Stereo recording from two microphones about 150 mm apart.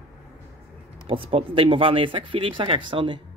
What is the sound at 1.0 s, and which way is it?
Speech, 35° right (ahead or behind).